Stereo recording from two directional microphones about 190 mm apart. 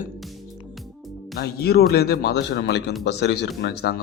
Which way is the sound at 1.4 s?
55° left (ahead or behind).